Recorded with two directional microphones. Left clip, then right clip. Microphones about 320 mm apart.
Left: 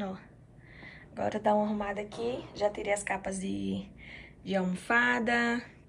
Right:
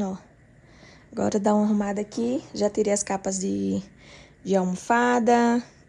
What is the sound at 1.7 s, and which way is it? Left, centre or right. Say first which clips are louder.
Speech: right 7 dB; right.